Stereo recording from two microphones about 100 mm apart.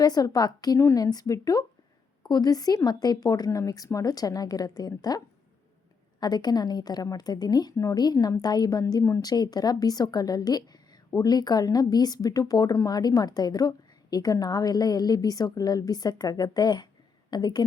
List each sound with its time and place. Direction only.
0.0 s a woman's voice: 40° left (ahead or behind)